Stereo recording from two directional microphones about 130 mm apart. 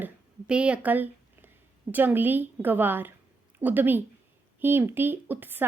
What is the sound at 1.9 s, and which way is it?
A woman's voice, 15° right (ahead or behind).